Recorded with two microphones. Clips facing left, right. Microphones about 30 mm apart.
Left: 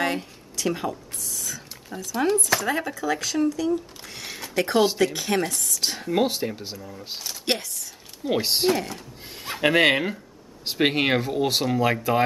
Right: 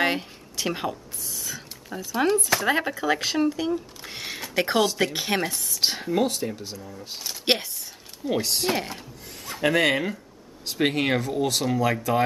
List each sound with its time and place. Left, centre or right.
0.0 s speech: right
4.0 s a sound: centre
4.9 s speech: right
5.4 s speech: centre
5.8 s a sound: centre
6.1 s speech: centre
6.8 s speech: centre
7.4 s speech: right
8.3 s speech: left
8.7 s speech: centre
9.6 s speech: left